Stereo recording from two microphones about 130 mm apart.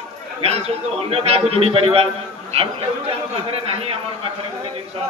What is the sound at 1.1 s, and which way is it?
Speech, 50° right (ahead or behind).